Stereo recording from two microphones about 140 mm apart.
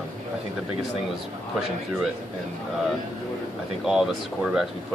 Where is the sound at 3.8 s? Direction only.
5° right (ahead or behind).